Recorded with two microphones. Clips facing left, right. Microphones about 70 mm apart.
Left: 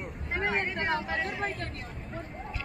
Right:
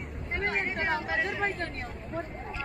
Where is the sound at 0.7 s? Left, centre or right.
Centre.